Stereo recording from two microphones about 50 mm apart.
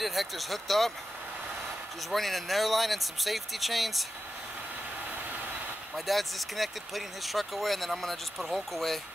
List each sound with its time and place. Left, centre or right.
0.0 s speech: centre
2.0 s speech: centre
5.9 s speech: centre